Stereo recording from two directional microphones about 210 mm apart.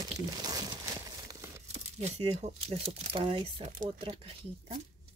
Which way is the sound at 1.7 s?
30° right (ahead or behind).